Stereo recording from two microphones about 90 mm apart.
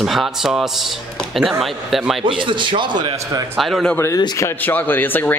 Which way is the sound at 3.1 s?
40° right (ahead or behind).